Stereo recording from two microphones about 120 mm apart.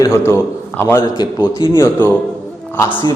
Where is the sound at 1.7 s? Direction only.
25° left (ahead or behind).